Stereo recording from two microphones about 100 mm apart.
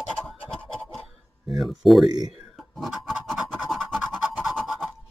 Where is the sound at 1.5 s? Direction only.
Centre (ahead or behind).